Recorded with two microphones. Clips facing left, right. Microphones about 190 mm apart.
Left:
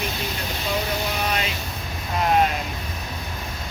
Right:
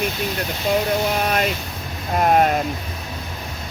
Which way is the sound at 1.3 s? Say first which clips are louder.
Right 5 dB; 50° right (ahead or behind).